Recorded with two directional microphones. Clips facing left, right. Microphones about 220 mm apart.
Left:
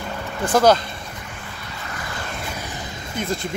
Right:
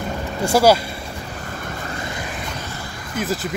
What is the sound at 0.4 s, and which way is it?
Speech, 10° right (ahead or behind).